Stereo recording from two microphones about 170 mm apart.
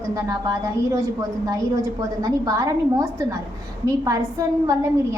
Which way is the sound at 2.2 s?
20° right (ahead or behind).